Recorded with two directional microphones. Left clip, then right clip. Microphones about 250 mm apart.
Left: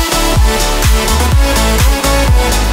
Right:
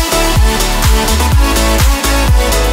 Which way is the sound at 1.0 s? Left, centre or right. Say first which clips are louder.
Even; centre.